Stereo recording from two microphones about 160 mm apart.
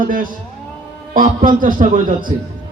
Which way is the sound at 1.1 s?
60° right (ahead or behind).